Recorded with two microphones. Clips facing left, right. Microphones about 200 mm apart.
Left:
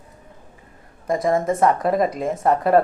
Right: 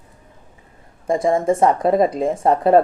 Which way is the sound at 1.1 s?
30° right (ahead or behind).